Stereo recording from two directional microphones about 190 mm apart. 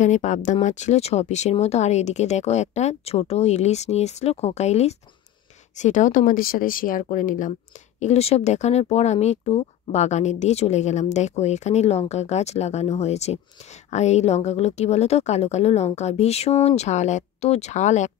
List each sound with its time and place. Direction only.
0.0 s speech: 40° left (ahead or behind)